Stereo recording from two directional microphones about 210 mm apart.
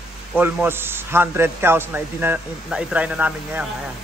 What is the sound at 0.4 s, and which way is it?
A man's voice, 10° right (ahead or behind).